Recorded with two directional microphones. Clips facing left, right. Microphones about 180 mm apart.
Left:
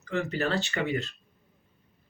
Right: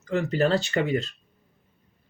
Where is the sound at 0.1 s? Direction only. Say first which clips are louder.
Right 6 dB; 40° right (ahead or behind).